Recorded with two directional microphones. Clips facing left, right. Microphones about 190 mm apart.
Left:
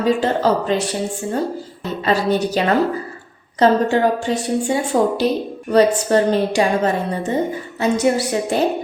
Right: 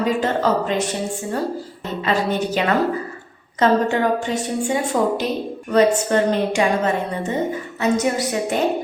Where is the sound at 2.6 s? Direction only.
35° left (ahead or behind).